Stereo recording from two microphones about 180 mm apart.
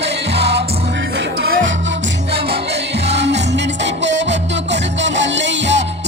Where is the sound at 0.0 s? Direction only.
70° right (ahead or behind).